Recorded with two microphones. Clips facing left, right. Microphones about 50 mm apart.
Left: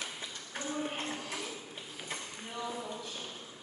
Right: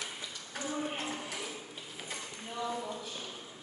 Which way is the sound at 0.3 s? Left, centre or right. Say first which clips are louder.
Even; left.